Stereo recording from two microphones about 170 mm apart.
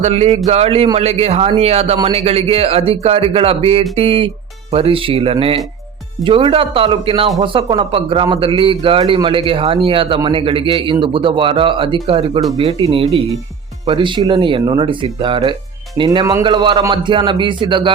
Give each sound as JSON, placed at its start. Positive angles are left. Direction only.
{"t": 0.0, "sound": "a man's voice", "side_deg": -40}